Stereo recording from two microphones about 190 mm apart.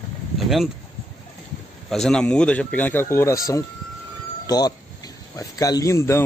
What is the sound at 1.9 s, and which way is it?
Speech, 5° left (ahead or behind).